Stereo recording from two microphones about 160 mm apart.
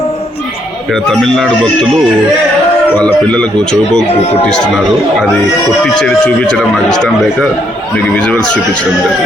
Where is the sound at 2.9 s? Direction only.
10° left (ahead or behind).